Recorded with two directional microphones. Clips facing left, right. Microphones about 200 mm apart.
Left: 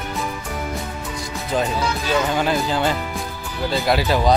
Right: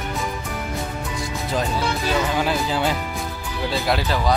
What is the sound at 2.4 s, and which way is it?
Speech, 5° right (ahead or behind).